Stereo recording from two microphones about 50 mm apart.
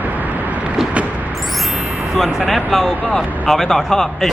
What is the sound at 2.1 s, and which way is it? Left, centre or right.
Speech, centre.